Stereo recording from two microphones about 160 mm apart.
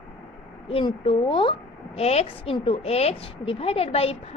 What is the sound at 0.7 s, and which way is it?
A woman's voice, 35° left (ahead or behind).